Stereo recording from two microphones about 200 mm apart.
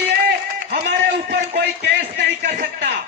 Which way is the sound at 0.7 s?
50° right (ahead or behind).